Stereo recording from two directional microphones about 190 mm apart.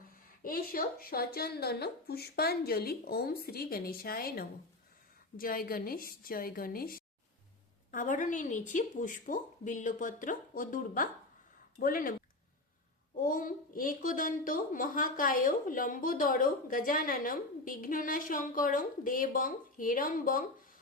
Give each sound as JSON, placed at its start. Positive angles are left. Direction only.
{"t": 0.4, "sound": "a woman's voice", "side_deg": 50}
{"t": 13.1, "sound": "a woman's voice", "side_deg": 45}